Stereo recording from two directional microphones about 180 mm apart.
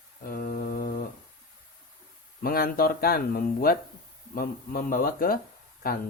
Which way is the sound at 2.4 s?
55° left (ahead or behind).